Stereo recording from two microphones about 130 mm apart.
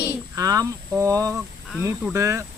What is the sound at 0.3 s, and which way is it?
Speech, 30° right (ahead or behind).